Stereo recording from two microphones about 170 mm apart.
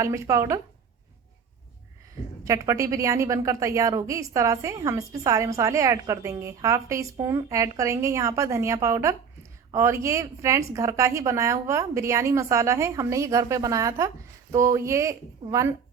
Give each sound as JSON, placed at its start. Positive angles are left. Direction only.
{"t": 0.0, "sound": "a woman's voice", "side_deg": -15}
{"t": 2.4, "sound": "a woman's voice", "side_deg": -20}